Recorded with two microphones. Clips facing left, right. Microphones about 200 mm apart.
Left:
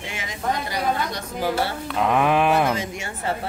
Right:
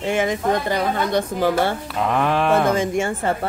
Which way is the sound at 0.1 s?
55° right (ahead or behind).